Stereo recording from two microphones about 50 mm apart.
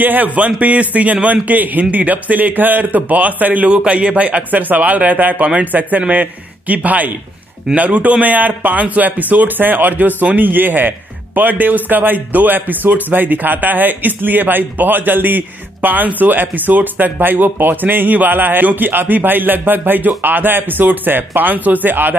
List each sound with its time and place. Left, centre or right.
0.0 s speech: right